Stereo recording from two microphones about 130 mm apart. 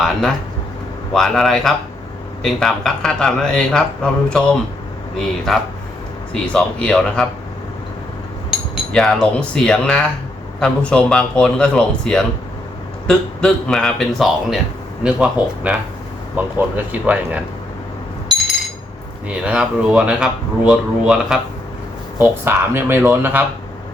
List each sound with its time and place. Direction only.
0.0 s speech: centre (ahead or behind)
6.5 s a man's voice: 5° left (ahead or behind)
8.5 s a sound: 5° right (ahead or behind)
8.9 s a man's voice: 5° left (ahead or behind); by 17.4 s 10° right (ahead or behind)
19.3 s speech: 10° right (ahead or behind)
22.2 s speech: 15° right (ahead or behind)